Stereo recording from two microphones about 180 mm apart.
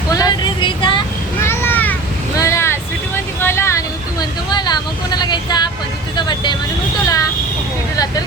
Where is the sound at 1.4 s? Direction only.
15° left (ahead or behind).